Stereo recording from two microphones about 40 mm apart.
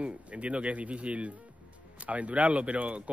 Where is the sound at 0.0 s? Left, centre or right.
Right.